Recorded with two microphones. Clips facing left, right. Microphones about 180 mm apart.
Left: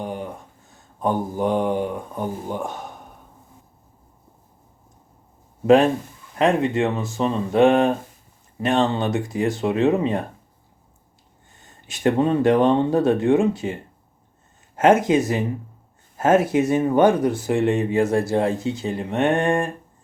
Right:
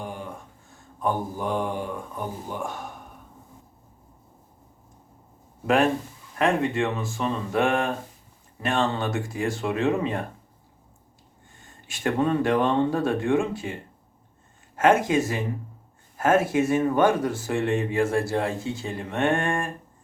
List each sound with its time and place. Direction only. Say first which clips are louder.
0.0 s a sound: left 6 dB; 20° left (ahead or behind)
1.0 s speech: left 5 dB; 20° left (ahead or behind)
5.6 s speech: left 6 dB; 20° left (ahead or behind)
11.9 s speech: left 5 dB; 20° left (ahead or behind)
14.8 s speech: left 4 dB; 20° left (ahead or behind)